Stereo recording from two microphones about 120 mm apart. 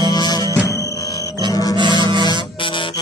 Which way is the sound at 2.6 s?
45° left (ahead or behind).